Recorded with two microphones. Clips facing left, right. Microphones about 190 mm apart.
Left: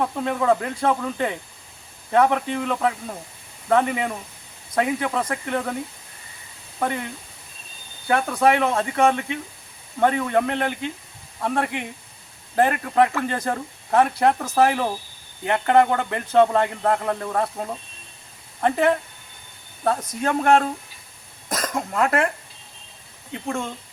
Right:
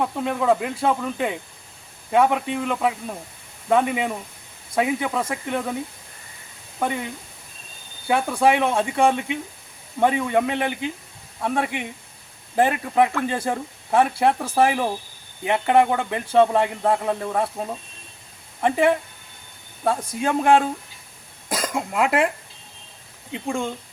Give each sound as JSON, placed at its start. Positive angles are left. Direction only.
{"t": 0.0, "sound": "speech", "side_deg": -5}
{"t": 6.7, "sound": "speech", "side_deg": -5}
{"t": 23.3, "sound": "speech", "side_deg": -15}